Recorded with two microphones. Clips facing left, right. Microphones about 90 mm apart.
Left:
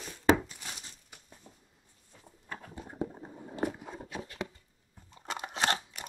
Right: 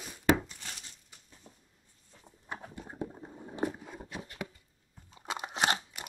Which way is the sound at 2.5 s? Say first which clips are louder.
Right 2 dB; 15° right (ahead or behind).